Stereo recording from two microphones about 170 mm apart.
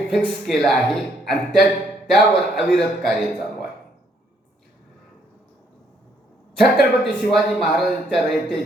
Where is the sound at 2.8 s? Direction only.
5° left (ahead or behind).